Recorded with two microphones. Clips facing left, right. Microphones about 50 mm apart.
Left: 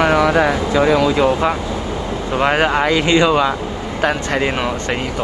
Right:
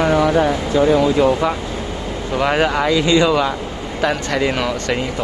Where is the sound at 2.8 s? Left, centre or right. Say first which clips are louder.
Left 1 dB; left.